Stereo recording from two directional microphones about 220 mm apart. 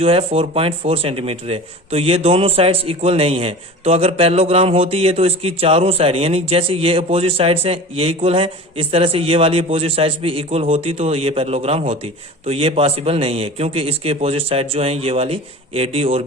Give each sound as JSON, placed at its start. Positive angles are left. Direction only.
{"t": 0.0, "sound": "speech", "side_deg": -25}